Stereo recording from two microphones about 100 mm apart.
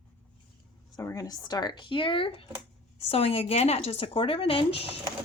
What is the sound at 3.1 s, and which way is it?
Speech, 70° left (ahead or behind).